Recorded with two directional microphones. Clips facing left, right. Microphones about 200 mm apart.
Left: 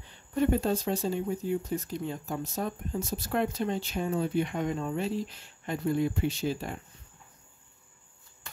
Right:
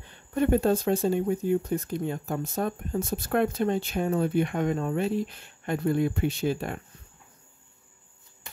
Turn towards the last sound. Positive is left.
turn(degrees=-60)  # may be behind; listen again after turning